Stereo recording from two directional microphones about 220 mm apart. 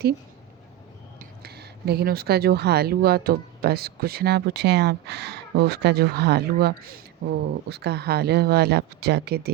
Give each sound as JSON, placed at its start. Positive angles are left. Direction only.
{"t": 1.2, "sound": "speech", "side_deg": -45}